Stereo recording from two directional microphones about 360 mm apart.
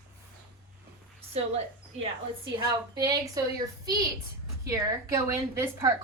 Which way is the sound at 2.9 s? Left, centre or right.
Centre.